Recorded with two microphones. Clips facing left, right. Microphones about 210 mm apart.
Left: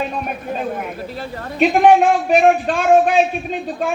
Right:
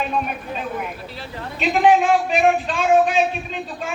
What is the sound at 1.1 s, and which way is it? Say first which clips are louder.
Speech: left 5 dB; 50° left (ahead or behind).